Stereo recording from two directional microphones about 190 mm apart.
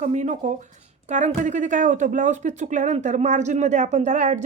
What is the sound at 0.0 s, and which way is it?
Speech, 40° right (ahead or behind).